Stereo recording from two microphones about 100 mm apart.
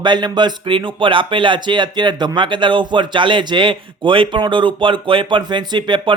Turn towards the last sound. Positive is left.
turn(degrees=-50)  # may be behind; listen again after turning